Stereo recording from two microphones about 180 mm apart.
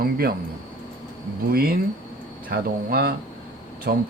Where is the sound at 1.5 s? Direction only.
55° right (ahead or behind).